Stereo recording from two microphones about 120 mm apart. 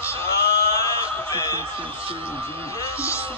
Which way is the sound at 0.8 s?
25° left (ahead or behind).